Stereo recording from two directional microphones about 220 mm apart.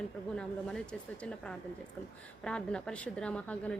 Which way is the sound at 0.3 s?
5° left (ahead or behind).